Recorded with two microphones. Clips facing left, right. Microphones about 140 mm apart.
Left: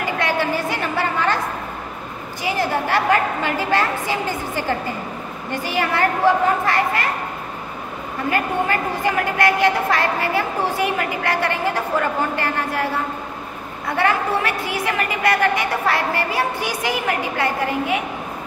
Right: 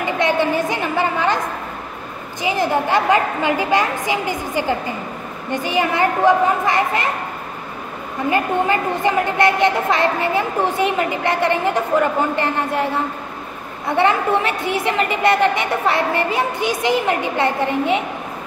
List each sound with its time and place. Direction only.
0.0 s a sound: 20° right (ahead or behind)
2.4 s a woman's voice: 20° right (ahead or behind)
8.3 s a woman's voice: 20° right (ahead or behind)
13.8 s a woman's voice: 20° right (ahead or behind)